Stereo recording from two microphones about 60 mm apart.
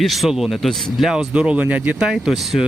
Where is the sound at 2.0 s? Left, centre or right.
Centre.